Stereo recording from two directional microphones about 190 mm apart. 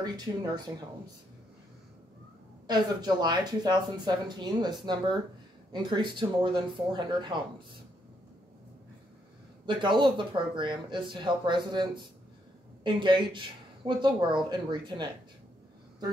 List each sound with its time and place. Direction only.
0.0 s a woman's voice: 20° right (ahead or behind)
2.6 s a woman's voice: 20° right (ahead or behind)
9.7 s a woman's voice: 25° right (ahead or behind)